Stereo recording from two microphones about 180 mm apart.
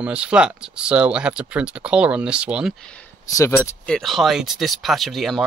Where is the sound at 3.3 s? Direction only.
15° left (ahead or behind).